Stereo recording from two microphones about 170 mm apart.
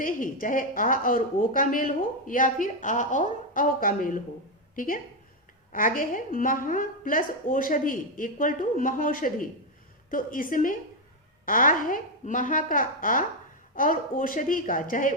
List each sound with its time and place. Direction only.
0.0 s a woman's voice: 55° left (ahead or behind)